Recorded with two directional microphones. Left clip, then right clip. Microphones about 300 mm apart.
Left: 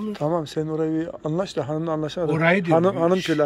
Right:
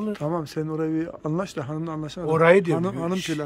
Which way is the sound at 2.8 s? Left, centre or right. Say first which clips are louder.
Left 8 dB; centre.